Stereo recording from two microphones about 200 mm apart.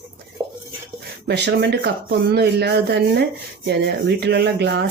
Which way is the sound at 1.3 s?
55° right (ahead or behind).